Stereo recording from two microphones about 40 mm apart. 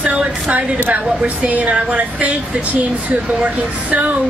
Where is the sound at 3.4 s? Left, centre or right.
Right.